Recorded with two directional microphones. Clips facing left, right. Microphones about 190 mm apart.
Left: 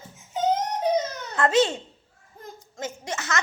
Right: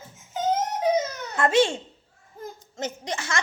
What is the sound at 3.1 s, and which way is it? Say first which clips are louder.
Speech: left 3 dB; 30° right (ahead or behind).